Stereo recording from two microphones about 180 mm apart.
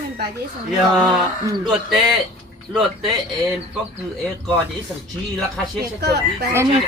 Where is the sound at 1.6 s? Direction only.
Centre (ahead or behind).